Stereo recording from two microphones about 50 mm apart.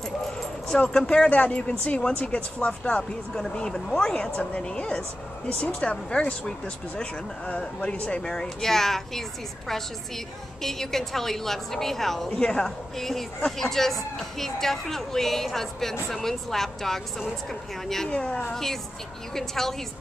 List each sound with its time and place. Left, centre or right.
0.8 s speech: centre
1.3 s speech: left; by 18.1 s centre
18.1 s speech: left
18.5 s speech: centre